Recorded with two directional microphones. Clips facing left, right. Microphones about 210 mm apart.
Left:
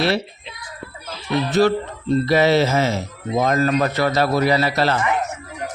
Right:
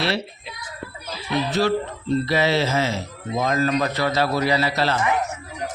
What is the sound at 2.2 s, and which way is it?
A man's voice, 45° left (ahead or behind).